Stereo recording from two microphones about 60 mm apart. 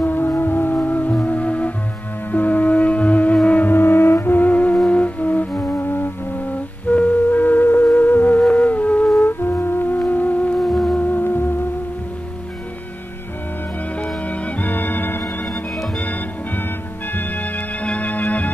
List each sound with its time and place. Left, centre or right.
0.0 s music: left
8.4 s music: centre
9.2 s music: left
10.6 s music: centre
11.0 s music: left
14.4 s music: left
17.8 s organ: left